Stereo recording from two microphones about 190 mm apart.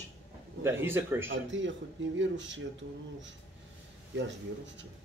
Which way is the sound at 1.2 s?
80° right.